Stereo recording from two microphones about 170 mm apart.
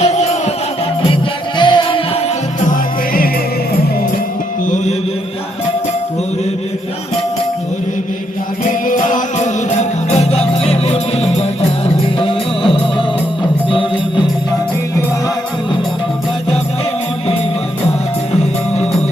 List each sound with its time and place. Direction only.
0.0 s music: 40° left (ahead or behind)
1.0 s music: 30° left (ahead or behind)
2.6 s music: 60° left (ahead or behind)
4.6 s music: 45° left (ahead or behind)
8.9 s music: 50° left (ahead or behind); by 14.3 s 30° left (ahead or behind)